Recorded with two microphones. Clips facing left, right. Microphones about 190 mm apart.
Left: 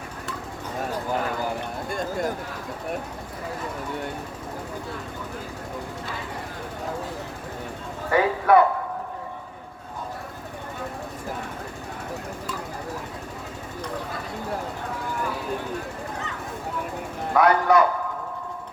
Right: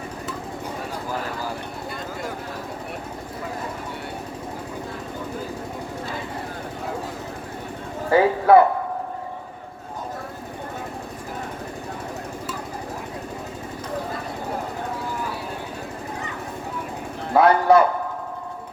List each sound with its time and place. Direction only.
8.1 s speech: 30° right (ahead or behind)
17.3 s a man's voice: 30° right (ahead or behind)